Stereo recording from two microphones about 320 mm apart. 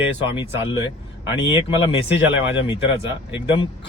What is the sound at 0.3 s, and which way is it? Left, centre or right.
Speech, centre.